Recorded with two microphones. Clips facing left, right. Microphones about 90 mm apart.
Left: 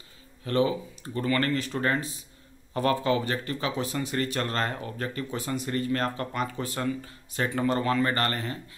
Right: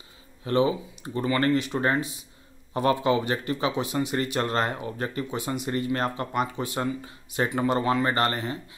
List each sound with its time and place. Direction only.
0.5 s speech: 20° right (ahead or behind)
5.4 s speech: 5° right (ahead or behind)
5.7 s speech: 20° right (ahead or behind)